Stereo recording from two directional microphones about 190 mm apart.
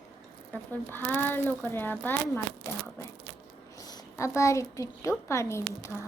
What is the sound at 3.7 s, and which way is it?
A woman's voice, 20° left (ahead or behind).